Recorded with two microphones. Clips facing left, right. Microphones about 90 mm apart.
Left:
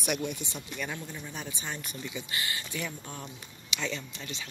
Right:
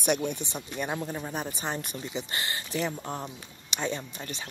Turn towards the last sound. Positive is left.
turn(degrees=-45)  # may be behind; listen again after turning